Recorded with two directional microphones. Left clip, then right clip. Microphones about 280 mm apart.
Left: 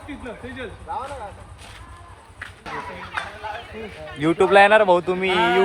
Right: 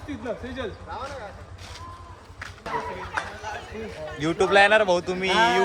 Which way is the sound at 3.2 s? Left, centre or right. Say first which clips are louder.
Left 1 dB; right.